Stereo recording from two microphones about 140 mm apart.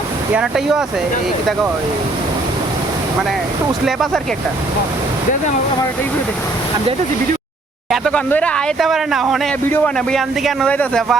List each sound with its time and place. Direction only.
0.3 s speech: centre (ahead or behind)
3.8 s speech: centre (ahead or behind)
7.9 s speech: centre (ahead or behind)
9.6 s speech: 10° left (ahead or behind)